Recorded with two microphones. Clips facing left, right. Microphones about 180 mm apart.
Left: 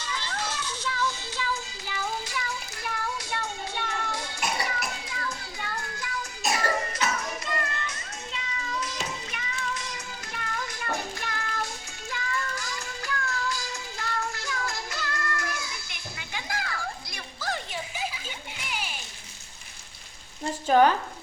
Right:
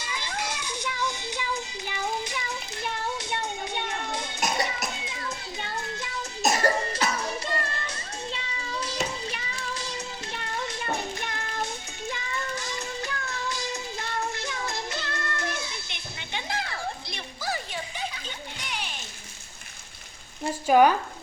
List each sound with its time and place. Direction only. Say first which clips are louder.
0.0 s music: even; 10° right (ahead or behind)
6.4 s cough: right 4 dB; 40° right (ahead or behind)
17.4 s music: even; 5° right (ahead or behind)
20.4 s frying: right 1 dB; 10° right (ahead or behind)